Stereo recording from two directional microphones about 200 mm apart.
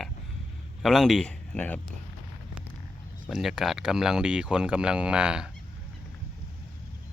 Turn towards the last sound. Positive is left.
turn(degrees=-5)  # may be behind; listen again after turning